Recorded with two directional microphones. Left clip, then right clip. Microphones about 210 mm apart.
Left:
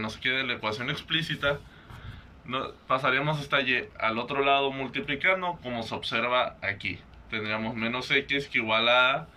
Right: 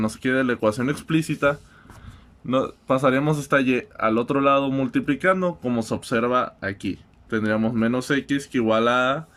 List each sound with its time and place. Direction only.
0.0 s speech: 70° right (ahead or behind)